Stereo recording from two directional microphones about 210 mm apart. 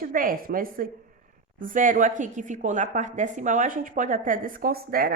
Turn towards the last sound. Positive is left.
turn(degrees=-45)  # may be behind; listen again after turning